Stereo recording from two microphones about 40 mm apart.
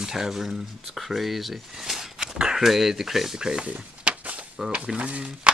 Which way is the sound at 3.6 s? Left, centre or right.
Right.